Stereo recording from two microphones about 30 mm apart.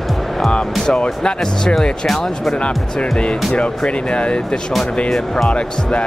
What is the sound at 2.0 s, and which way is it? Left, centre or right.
Speech, centre.